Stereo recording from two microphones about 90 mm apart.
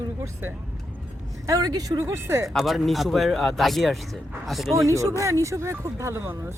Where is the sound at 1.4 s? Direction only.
45° right (ahead or behind).